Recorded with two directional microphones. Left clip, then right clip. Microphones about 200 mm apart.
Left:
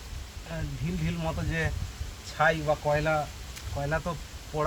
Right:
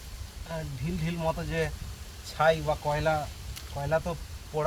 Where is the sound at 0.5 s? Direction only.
15° right (ahead or behind).